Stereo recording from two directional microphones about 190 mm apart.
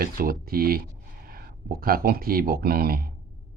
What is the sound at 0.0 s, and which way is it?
Speech, 50° right (ahead or behind).